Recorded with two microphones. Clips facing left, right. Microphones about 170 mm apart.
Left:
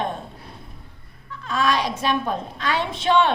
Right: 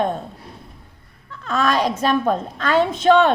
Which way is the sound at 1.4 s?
45° right (ahead or behind).